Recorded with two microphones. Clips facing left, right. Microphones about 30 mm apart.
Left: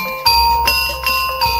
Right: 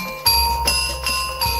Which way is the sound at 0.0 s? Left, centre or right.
Centre.